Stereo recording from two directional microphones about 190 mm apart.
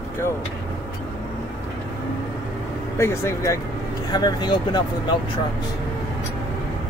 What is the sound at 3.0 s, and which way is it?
Speech, 15° left (ahead or behind).